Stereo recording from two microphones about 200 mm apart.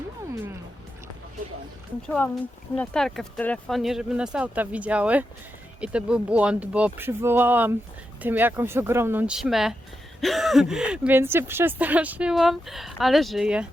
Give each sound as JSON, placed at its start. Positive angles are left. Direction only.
{"t": 2.0, "sound": "speech", "side_deg": 5}